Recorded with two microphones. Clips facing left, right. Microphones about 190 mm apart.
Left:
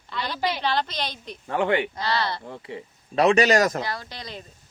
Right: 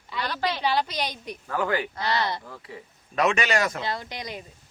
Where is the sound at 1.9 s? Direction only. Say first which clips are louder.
Even; 20° right (ahead or behind).